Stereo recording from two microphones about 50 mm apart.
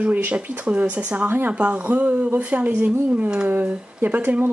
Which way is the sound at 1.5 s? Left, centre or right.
Right.